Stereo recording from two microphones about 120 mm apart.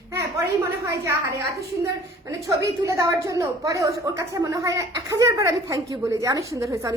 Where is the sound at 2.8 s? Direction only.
25° right (ahead or behind).